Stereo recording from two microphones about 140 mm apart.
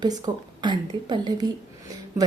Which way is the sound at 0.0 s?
30° right (ahead or behind).